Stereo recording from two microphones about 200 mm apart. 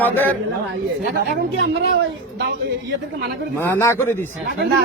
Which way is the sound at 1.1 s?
65° right (ahead or behind).